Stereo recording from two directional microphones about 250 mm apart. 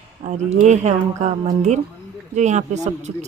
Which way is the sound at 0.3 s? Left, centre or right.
Right.